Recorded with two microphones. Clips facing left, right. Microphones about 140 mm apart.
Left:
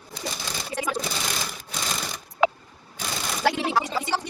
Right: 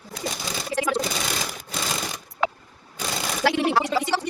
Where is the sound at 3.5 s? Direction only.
65° right (ahead or behind).